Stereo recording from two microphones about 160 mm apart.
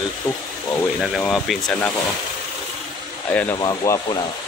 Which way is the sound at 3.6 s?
25° left (ahead or behind).